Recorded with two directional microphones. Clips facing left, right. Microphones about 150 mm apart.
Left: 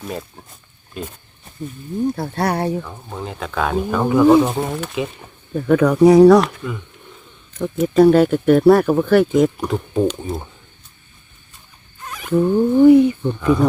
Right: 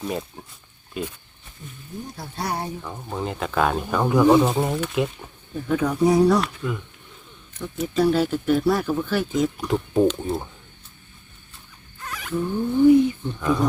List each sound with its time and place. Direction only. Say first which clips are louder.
0.0 s speech: right 1 dB; centre (ahead or behind)
2.1 s speech: left 8 dB; 60° left (ahead or behind)
2.8 s speech: right 1 dB; 5° right (ahead or behind)
5.5 s speech: left 8 dB; 65° left (ahead or behind); by 6.5 s 90° left
7.6 s speech: left 9 dB; 55° left (ahead or behind)
9.6 s speech: left 1 dB; centre (ahead or behind)
12.0 s insect: left 2 dB; 15° left (ahead or behind)
12.3 s speech: left 9 dB; 75° left (ahead or behind)